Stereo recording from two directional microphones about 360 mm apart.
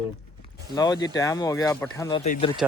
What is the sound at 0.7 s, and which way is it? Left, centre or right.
Speech, centre.